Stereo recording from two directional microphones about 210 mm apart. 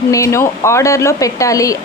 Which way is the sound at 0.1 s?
15° left (ahead or behind).